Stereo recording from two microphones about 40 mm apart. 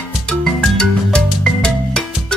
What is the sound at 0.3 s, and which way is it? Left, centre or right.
Music, left.